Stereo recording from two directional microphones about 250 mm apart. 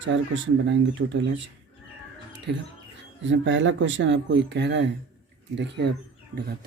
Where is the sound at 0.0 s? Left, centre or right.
Right.